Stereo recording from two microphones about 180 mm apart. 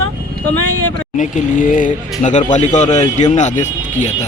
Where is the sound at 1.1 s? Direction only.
45° left (ahead or behind).